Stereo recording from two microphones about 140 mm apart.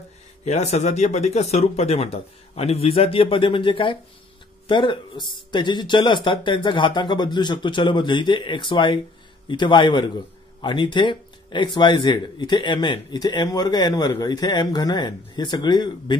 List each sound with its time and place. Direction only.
0.5 s a man's voice: 50° left (ahead or behind); by 16.2 s 30° left (ahead or behind)